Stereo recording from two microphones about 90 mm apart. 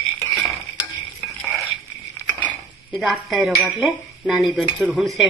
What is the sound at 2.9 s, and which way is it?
Speech, centre (ahead or behind).